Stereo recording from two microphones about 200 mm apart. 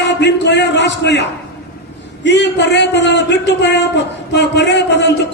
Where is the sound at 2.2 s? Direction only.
60° left (ahead or behind).